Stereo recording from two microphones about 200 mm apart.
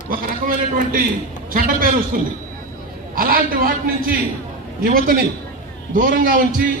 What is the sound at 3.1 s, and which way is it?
Speech, 45° right (ahead or behind).